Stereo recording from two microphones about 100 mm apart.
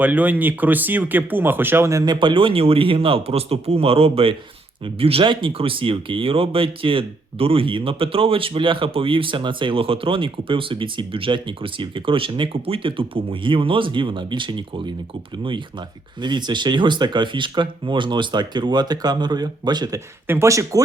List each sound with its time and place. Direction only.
0.0 s speech: 15° right (ahead or behind); by 2.1 s 35° right (ahead or behind)
2.1 s speech: 55° right (ahead or behind)
16.2 s speech: 50° right (ahead or behind)
20.2 s speech: 25° right (ahead or behind)